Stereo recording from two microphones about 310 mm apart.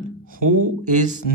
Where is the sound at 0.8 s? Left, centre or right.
Right.